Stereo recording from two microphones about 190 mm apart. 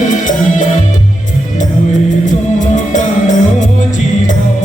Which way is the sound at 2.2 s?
40° left (ahead or behind).